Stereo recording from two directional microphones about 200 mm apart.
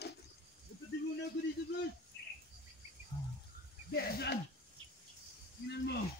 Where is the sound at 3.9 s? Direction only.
50° left (ahead or behind).